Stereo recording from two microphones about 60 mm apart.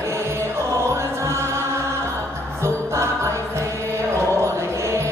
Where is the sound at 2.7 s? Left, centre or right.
Right.